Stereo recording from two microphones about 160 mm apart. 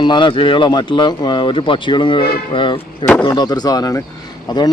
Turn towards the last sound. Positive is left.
turn(degrees=25)  # may be behind; listen again after turning